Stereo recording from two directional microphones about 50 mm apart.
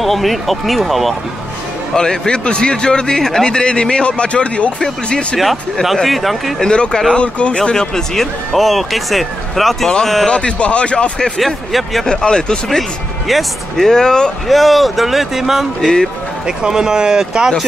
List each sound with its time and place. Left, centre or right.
0.0 s speech: centre
2.0 s a man's voice: centre
5.4 s speech: centre
6.6 s a man's voice: centre
10.3 s speech: left
11.3 s speech: centre
12.1 s a man's voice: centre
13.3 s a man's voice: centre
14.5 s speech: centre